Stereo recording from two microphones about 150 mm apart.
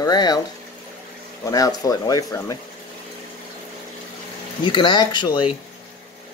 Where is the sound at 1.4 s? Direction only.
25° left (ahead or behind).